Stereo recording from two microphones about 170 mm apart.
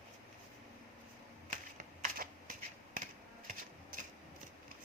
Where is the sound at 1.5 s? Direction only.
55° right (ahead or behind).